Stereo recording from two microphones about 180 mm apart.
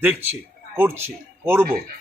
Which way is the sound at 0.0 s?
10° right (ahead or behind).